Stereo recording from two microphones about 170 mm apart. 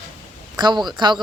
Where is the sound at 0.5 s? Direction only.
25° right (ahead or behind).